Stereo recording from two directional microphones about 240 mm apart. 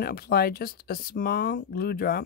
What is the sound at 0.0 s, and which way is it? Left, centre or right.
Speech, left.